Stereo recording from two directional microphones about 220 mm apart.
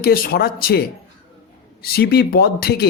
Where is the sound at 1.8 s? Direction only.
45° left (ahead or behind).